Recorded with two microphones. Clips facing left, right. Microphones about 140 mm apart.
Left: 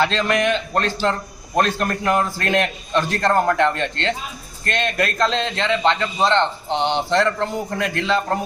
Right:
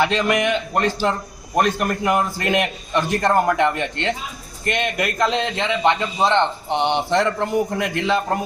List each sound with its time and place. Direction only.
0.0 s a man's voice: 15° right (ahead or behind)